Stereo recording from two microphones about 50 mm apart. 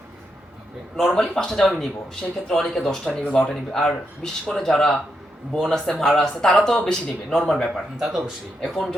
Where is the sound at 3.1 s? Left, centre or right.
Centre.